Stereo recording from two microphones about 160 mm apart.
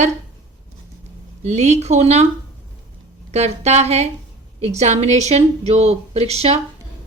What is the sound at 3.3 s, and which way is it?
A woman's voice, 40° right (ahead or behind).